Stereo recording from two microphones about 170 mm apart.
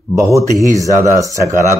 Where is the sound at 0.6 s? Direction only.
20° right (ahead or behind).